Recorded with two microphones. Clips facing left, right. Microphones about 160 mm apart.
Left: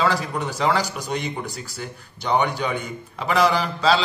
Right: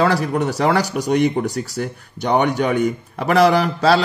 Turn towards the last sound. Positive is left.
turn(degrees=-60)  # may be behind; listen again after turning